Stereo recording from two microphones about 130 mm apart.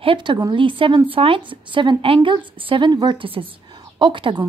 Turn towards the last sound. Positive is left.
turn(degrees=-35)  # may be behind; listen again after turning